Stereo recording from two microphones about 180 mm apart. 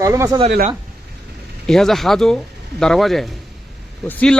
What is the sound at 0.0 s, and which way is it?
Speech, 15° right (ahead or behind).